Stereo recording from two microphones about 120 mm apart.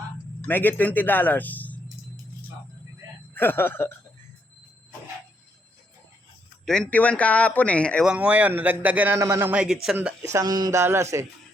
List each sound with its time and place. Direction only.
0.4 s a man's voice: 15° left (ahead or behind)
3.3 s speech: 20° left (ahead or behind)
6.7 s speech: 10° left (ahead or behind)
8.0 s a man's voice: 10° right (ahead or behind)
10.2 s speech: 30° right (ahead or behind)